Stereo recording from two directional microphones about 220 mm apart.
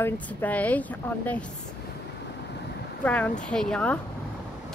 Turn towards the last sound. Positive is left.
turn(degrees=5)  # may be behind; listen again after turning